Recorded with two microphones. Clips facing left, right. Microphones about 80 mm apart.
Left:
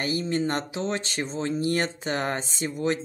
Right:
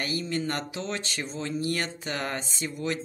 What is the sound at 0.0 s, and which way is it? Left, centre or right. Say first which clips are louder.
Speech: left 4 dB; left.